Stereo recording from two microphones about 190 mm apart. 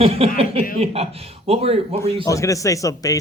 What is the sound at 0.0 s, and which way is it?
A man's voice, 30° right (ahead or behind).